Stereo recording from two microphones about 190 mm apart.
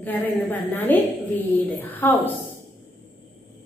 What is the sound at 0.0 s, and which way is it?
A woman's voice, 10° left (ahead or behind).